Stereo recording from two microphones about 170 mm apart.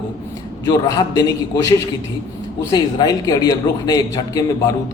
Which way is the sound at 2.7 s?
25° left (ahead or behind).